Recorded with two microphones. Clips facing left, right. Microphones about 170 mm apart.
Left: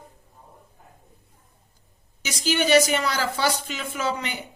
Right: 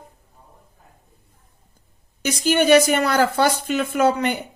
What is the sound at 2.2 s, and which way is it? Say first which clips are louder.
A woman's voice: right 6 dB; 50° right (ahead or behind).